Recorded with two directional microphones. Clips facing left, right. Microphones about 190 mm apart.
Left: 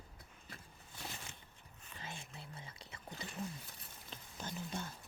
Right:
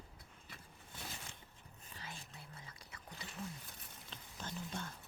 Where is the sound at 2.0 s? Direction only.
25° left (ahead or behind).